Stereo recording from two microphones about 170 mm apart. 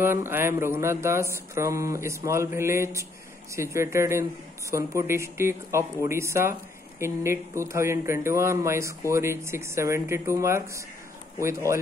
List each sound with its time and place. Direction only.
0.0 s speech: 15° right (ahead or behind)